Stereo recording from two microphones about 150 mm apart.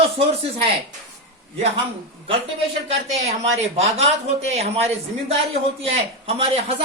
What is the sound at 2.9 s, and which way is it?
Speech, 45° right (ahead or behind).